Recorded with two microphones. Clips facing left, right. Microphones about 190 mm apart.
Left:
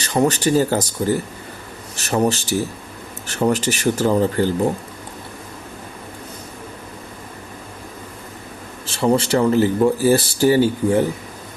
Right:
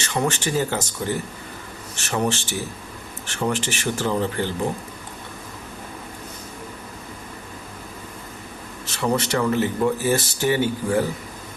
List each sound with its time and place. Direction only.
0.0 s speech: 35° left (ahead or behind)
8.9 s speech: 30° left (ahead or behind)